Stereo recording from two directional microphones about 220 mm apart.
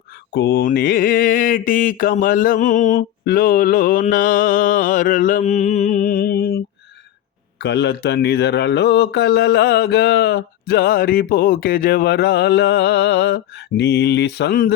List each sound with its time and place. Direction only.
0.3 s mantra: 50° left (ahead or behind)
7.6 s speech: 50° left (ahead or behind)